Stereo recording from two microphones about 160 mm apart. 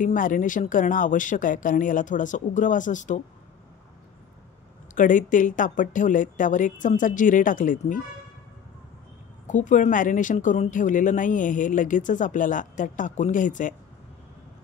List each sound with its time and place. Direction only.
0.0 s a woman's voice: 55° left (ahead or behind)
4.9 s a woman's voice: 55° left (ahead or behind)
9.5 s a woman's voice: 50° left (ahead or behind)